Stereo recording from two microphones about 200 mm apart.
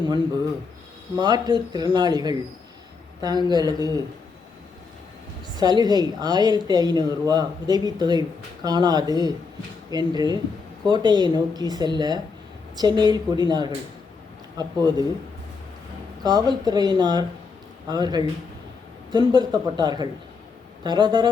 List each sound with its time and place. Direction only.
1.1 s speech: 20° right (ahead or behind)
5.5 s speech: 20° right (ahead or behind)
16.2 s speech: 20° right (ahead or behind)